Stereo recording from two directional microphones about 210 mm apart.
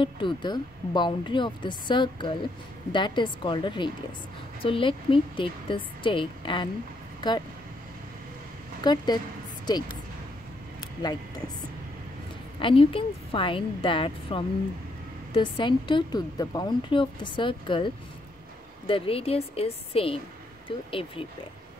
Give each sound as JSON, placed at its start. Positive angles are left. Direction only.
{"t": 0.0, "sound": "speech", "side_deg": 20}
{"t": 8.8, "sound": "speech", "side_deg": 20}
{"t": 10.8, "sound": "a sound", "side_deg": 20}
{"t": 12.5, "sound": "speech", "side_deg": 25}